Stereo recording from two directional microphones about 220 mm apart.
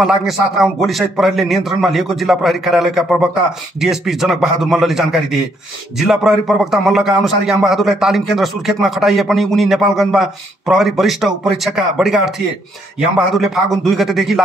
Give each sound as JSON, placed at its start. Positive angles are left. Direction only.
{"t": 0.0, "sound": "a man's voice", "side_deg": 0}
{"t": 13.3, "sound": "a man's voice", "side_deg": 0}